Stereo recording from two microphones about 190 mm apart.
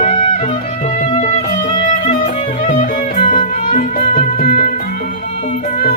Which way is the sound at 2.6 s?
40° left (ahead or behind).